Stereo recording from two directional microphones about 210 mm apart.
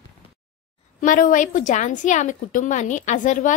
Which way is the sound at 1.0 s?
40° left (ahead or behind).